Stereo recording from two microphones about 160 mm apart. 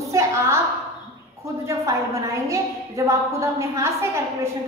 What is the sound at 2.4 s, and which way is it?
A woman's voice, 20° right (ahead or behind).